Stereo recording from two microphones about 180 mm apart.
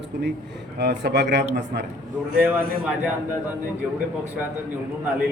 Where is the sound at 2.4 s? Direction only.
10° right (ahead or behind).